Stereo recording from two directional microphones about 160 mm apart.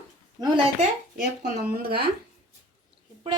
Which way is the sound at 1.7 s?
70° right (ahead or behind).